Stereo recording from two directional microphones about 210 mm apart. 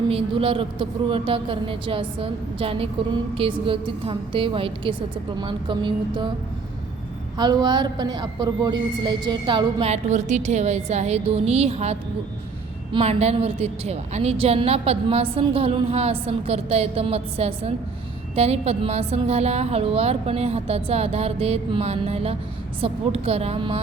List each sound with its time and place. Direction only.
0.1 s a woman's voice: 25° right (ahead or behind)
7.3 s a woman's voice: 20° right (ahead or behind)